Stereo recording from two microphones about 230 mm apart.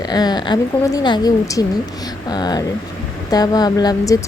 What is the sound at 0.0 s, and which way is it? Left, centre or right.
Speech, centre.